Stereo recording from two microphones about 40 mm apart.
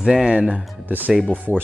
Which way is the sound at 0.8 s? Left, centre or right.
Right.